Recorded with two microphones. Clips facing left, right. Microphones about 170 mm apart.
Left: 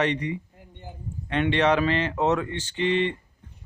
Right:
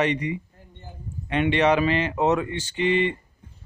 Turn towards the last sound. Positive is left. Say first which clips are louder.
# right 2 dB
turn(degrees=-10)  # may be behind; listen again after turning